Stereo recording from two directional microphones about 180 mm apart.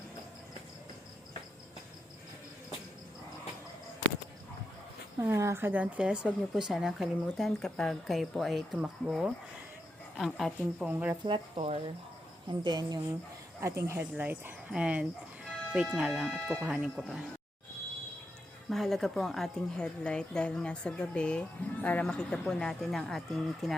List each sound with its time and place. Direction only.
5.2 s a woman's voice: 15° right (ahead or behind); by 10.9 s centre (ahead or behind)
10.9 s speech: 15° right (ahead or behind)
11.3 s speech: 35° right (ahead or behind)
12.6 s a woman's voice: 25° right (ahead or behind); by 17.2 s 5° right (ahead or behind)
18.7 s a woman's voice: centre (ahead or behind)